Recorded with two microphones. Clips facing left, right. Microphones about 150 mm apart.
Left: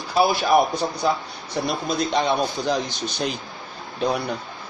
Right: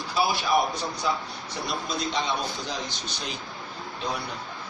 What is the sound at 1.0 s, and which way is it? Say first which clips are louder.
Speech: left 5 dB; 40° left (ahead or behind).